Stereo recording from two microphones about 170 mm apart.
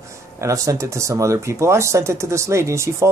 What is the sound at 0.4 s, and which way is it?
Speech, 20° right (ahead or behind).